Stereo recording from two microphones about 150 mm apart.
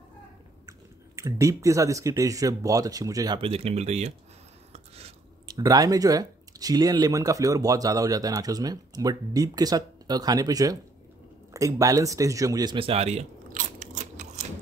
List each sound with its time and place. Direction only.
0.7 s speech: 20° right (ahead or behind)
3.3 s speech: 40° right (ahead or behind)
4.7 s a sound: 45° right (ahead or behind)
5.6 s speech: 25° right (ahead or behind); by 13.2 s 45° right (ahead or behind)
13.5 s biting: 55° right (ahead or behind)